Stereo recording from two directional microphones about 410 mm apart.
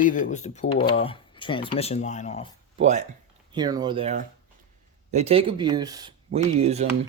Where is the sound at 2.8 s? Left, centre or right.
Centre.